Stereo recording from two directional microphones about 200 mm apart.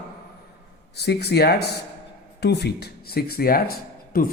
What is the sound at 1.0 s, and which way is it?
Speech, 55° left (ahead or behind).